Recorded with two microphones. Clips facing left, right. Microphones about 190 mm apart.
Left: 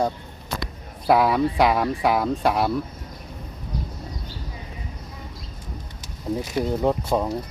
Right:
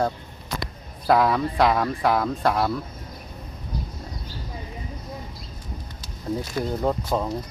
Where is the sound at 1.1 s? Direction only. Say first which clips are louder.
Left 1 dB; 5° left (ahead or behind).